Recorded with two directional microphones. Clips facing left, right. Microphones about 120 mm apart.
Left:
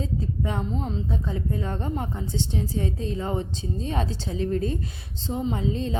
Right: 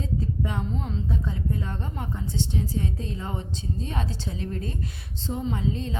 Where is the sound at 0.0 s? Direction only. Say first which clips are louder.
Left 1 dB; 30° left (ahead or behind).